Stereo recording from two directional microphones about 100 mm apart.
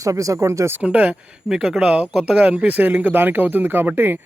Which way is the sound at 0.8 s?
15° right (ahead or behind).